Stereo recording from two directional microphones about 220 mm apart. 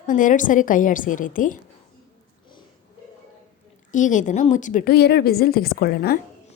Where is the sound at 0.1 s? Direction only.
35° left (ahead or behind).